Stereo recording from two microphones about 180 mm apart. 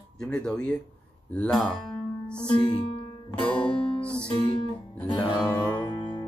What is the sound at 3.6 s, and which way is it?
Guitar, 30° left (ahead or behind).